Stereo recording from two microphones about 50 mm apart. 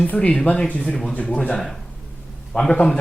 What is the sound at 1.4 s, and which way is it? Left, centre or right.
A man's voice, centre.